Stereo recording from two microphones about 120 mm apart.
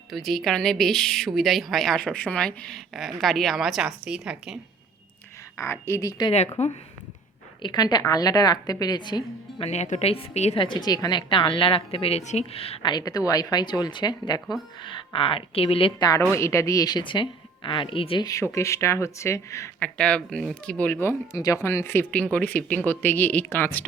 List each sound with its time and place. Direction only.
0.1 s a woman's voice: centre (ahead or behind)
5.5 s speech: 20° left (ahead or behind)
6.6 s speech: 70° left (ahead or behind)
7.6 s speech: 35° left (ahead or behind)
9.6 s a woman's voice: 65° left (ahead or behind)
10.6 s a woman's voice: 40° left (ahead or behind); by 12.9 s 55° left (ahead or behind)
12.9 s speech: 30° left (ahead or behind); by 15.9 s 50° left (ahead or behind)
16.0 s speech: 35° left (ahead or behind)
18.3 s speech: 25° left (ahead or behind)
19.8 s speech: 10° left (ahead or behind)